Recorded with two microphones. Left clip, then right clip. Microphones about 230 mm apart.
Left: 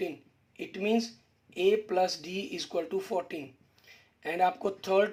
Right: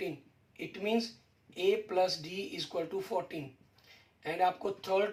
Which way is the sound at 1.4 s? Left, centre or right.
Left.